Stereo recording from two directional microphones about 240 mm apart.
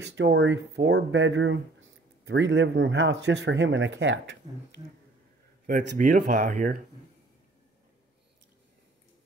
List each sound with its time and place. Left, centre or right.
0.0 s speech: right
5.7 s speech: right